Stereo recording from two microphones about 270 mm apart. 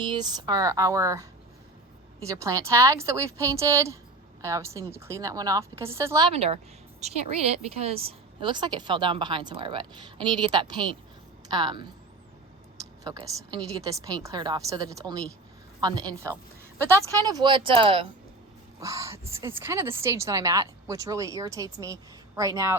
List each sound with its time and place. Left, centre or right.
0.0 s a woman's voice: centre
13.1 s a woman's voice: centre